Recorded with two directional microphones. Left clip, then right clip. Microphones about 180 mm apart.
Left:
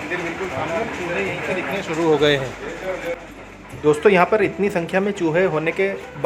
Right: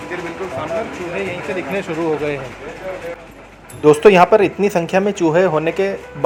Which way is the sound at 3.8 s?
20° right (ahead or behind).